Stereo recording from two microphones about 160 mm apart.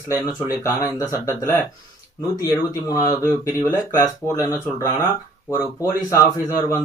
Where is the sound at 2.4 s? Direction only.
20° left (ahead or behind).